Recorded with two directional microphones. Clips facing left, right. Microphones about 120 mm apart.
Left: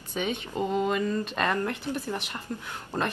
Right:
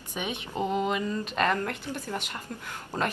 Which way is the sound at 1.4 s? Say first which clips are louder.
Right 2 dB; 10° left (ahead or behind).